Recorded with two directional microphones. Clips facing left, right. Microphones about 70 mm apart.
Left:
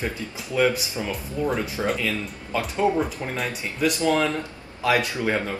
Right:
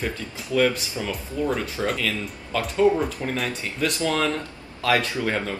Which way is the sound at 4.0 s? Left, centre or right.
Centre.